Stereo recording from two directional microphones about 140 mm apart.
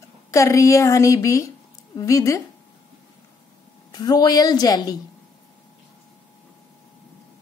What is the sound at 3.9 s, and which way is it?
A woman's voice, 30° left (ahead or behind).